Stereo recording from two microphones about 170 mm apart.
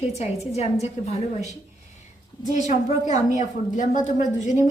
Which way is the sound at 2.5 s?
45° left (ahead or behind).